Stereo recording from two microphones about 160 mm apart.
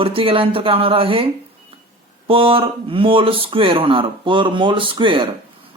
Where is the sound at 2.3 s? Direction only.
35° right (ahead or behind).